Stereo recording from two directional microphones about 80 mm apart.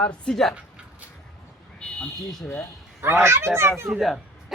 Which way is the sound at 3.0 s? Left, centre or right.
Right.